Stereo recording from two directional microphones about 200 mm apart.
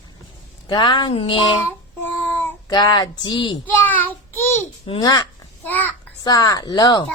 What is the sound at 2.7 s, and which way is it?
Speech, 20° left (ahead or behind).